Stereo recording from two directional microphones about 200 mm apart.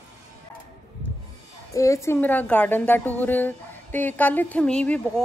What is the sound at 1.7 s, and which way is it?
A woman's voice, 15° left (ahead or behind).